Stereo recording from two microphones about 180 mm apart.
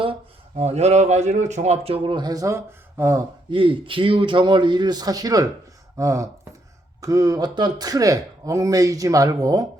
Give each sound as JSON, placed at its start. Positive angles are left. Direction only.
{"t": 0.0, "sound": "speech", "side_deg": -30}
{"t": 3.5, "sound": "speech", "side_deg": -30}